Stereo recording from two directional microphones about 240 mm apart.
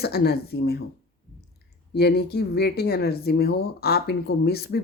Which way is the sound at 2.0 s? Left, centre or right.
Left.